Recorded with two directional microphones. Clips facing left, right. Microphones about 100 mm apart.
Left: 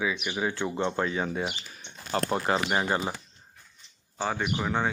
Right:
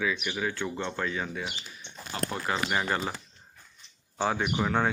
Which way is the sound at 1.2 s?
35° left (ahead or behind).